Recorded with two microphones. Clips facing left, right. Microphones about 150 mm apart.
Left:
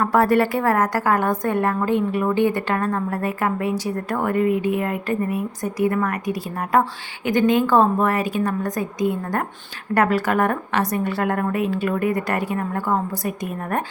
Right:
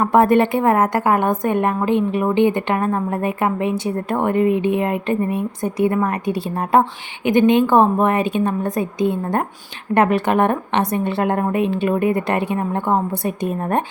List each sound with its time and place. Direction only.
0.0 s a woman's voice: 20° right (ahead or behind)